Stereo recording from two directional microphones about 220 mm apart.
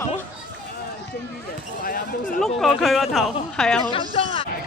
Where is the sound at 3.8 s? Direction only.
20° left (ahead or behind).